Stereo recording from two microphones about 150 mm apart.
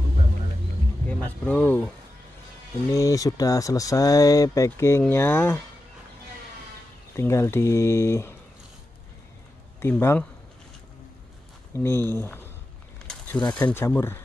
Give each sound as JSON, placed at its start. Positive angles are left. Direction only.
{"t": 1.0, "sound": "speech", "side_deg": 10}
{"t": 2.9, "sound": "speech", "side_deg": 20}
{"t": 7.2, "sound": "speech", "side_deg": 15}
{"t": 9.8, "sound": "speech", "side_deg": 15}
{"t": 11.8, "sound": "speech", "side_deg": 15}